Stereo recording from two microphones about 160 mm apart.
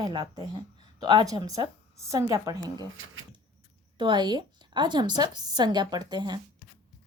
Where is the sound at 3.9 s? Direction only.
30° right (ahead or behind).